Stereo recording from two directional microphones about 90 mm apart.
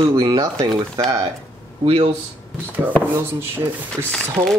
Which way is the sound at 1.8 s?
90° right.